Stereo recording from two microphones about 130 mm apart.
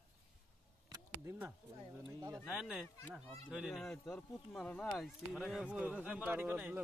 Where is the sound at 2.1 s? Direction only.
25° right (ahead or behind).